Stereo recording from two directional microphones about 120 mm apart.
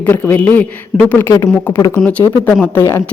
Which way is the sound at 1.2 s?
25° left (ahead or behind).